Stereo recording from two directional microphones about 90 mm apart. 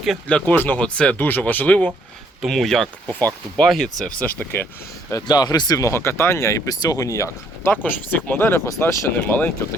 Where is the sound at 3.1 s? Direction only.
15° left (ahead or behind).